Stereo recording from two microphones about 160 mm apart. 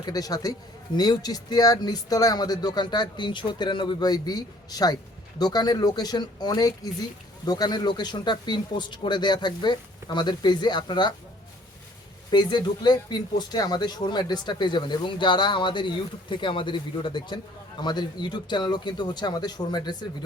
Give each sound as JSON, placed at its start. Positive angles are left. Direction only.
{"t": 0.0, "sound": "speech", "side_deg": 25}
{"t": 12.3, "sound": "speech", "side_deg": 30}